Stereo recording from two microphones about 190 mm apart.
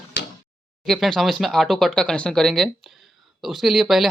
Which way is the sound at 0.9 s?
Centre (ahead or behind).